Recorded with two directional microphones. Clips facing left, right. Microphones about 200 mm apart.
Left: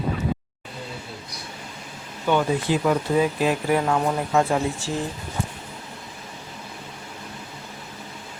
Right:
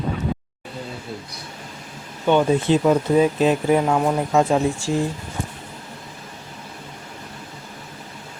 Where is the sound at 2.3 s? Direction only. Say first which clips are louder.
Right 5 dB; 25° right (ahead or behind).